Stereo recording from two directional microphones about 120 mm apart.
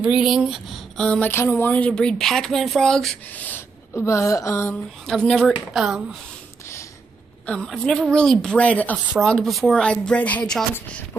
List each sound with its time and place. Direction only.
0.0 s a woman's voice: 5° right (ahead or behind); by 1.3 s 10° left (ahead or behind)
1.3 s a woman's voice: 20° left (ahead or behind); by 3.2 s 5° left (ahead or behind)
3.3 s speech: 15° left (ahead or behind)
5.0 s a woman's voice: 5° left (ahead or behind)
7.4 s a woman's voice: 5° left (ahead or behind)